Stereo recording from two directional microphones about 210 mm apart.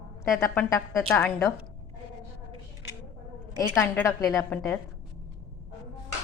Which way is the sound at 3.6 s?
15° left (ahead or behind).